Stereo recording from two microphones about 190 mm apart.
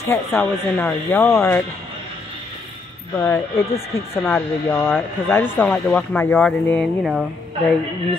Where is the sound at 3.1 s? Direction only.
15° left (ahead or behind).